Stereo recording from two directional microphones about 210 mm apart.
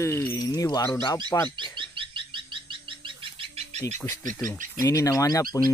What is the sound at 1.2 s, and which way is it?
Speech, 5° left (ahead or behind).